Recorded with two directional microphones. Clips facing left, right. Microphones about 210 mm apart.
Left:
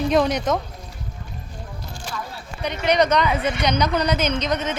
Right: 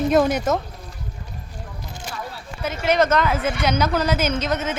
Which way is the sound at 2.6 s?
5° right (ahead or behind).